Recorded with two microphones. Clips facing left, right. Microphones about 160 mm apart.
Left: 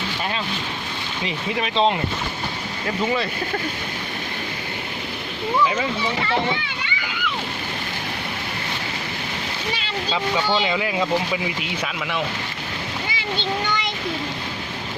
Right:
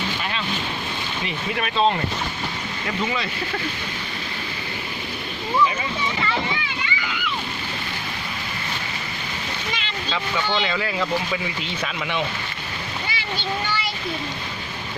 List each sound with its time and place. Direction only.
1.5 s speech: 20° left (ahead or behind)
10.6 s speech: 15° left (ahead or behind)